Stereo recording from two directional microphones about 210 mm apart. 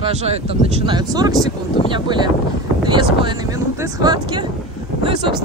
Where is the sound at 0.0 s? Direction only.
30° right (ahead or behind).